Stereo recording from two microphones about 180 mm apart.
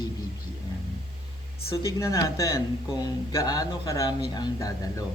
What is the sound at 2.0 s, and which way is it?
A man's voice, 20° left (ahead or behind).